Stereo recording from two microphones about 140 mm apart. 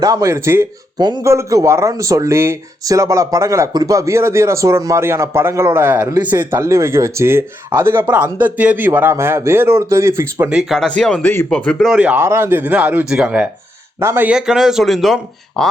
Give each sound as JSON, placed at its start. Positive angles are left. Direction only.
{"t": 0.0, "sound": "speech", "side_deg": -25}
{"t": 0.9, "sound": "speech", "side_deg": -30}
{"t": 10.5, "sound": "a man's voice", "side_deg": 0}
{"t": 11.9, "sound": "a man's voice", "side_deg": -10}